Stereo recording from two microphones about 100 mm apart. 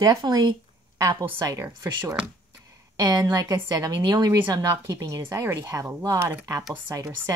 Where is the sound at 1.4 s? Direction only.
30° right (ahead or behind).